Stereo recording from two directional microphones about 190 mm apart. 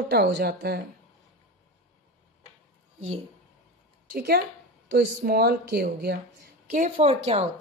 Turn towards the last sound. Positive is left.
turn(degrees=-35)  # may be behind; listen again after turning